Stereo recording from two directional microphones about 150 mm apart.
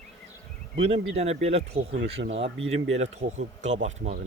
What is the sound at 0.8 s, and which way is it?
Speech, 45° right (ahead or behind).